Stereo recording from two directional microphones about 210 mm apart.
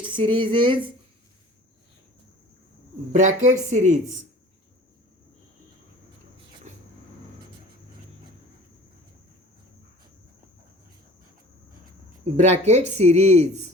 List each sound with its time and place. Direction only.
0.2 s speech: 25° right (ahead or behind)
3.1 s speech: 35° right (ahead or behind)
12.2 s speech: 35° right (ahead or behind)